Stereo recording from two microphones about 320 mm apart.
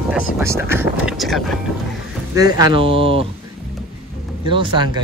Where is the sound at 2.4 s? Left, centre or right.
Centre.